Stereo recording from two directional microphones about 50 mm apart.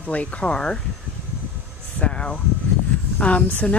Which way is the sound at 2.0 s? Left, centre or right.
Left.